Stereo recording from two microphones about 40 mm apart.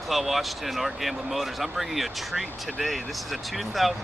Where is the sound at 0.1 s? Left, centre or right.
Centre.